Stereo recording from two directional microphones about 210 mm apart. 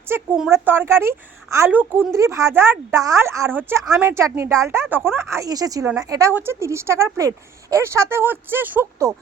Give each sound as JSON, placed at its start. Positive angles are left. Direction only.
{"t": 0.1, "sound": "a woman's voice", "side_deg": -5}